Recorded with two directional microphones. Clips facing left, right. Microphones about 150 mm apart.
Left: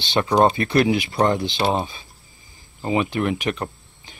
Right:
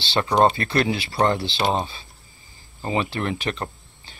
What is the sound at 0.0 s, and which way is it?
Speech, 15° left (ahead or behind).